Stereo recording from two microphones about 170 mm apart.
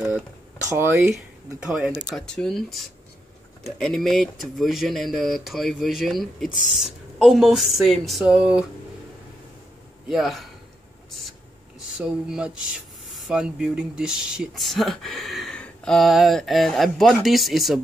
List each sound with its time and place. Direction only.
0.7 s speech: 15° right (ahead or behind)
10.0 s speech: centre (ahead or behind)
12.0 s speech: 5° right (ahead or behind)